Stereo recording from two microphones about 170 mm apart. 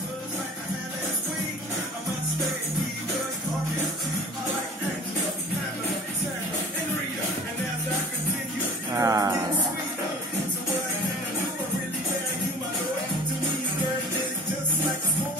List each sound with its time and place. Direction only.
8.9 s music: 20° right (ahead or behind)